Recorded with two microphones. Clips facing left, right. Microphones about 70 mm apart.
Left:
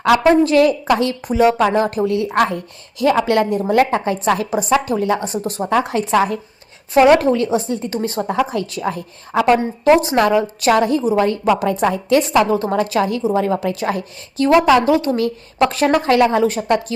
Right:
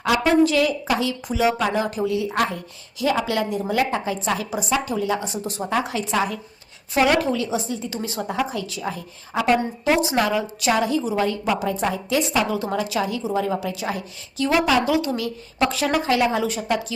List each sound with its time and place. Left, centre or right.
0.3 s a woman's voice: left
0.9 s a woman's voice: left
11.4 s a woman's voice: left
12.5 s a woman's voice: left